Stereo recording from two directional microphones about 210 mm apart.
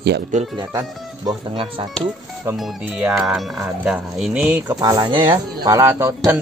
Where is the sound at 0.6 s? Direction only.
20° right (ahead or behind).